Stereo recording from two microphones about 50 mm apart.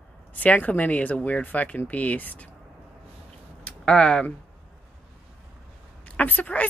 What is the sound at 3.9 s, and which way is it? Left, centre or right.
Speech, centre.